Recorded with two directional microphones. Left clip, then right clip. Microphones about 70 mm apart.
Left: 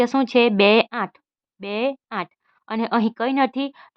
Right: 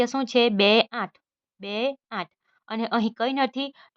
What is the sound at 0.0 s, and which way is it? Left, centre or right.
A woman's voice, left.